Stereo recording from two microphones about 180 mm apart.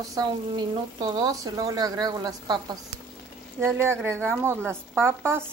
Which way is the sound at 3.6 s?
15° right (ahead or behind).